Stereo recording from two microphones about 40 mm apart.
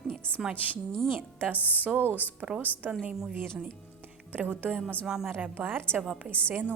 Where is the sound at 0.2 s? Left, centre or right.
Left.